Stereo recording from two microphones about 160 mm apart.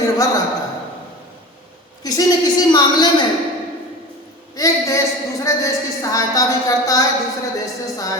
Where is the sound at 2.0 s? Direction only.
25° left (ahead or behind).